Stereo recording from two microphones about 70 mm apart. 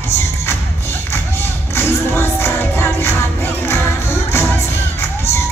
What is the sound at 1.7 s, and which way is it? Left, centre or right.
Music, left.